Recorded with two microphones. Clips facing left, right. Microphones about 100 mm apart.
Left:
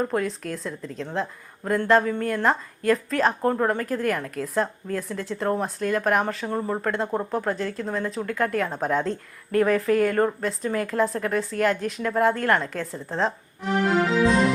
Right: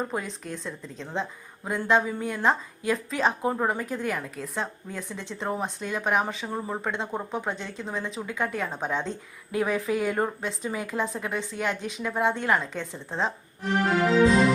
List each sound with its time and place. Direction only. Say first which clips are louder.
0.0 s a woman's voice: left 6 dB; centre (ahead or behind)
14.3 s music: even; centre (ahead or behind)